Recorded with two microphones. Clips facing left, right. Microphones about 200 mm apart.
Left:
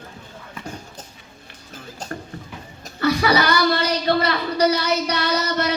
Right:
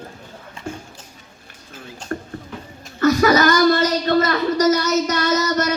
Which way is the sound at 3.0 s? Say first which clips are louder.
Right 4 dB; 45° right (ahead or behind).